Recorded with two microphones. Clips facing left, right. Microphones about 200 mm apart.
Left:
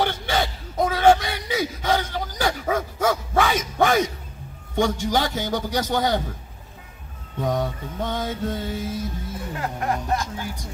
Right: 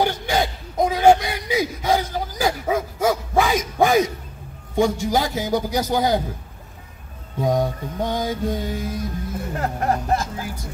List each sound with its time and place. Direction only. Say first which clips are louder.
0.0 s a sound: right 3 dB; 10° right (ahead or behind)
4.7 s music: right 2 dB; 10° right (ahead or behind)
7.3 s music: right 4 dB; 10° right (ahead or behind)
9.5 s speech: right 3 dB; 40° right (ahead or behind)